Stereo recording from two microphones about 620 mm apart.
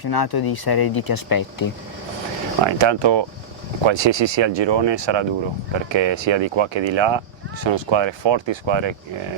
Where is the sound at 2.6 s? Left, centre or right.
Right.